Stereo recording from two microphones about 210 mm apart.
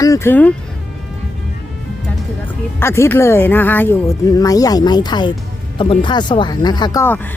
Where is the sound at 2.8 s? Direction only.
10° left (ahead or behind).